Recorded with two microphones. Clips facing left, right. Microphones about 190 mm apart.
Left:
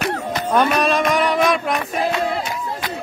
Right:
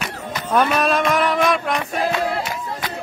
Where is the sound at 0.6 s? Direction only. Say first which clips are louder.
Even; centre (ahead or behind).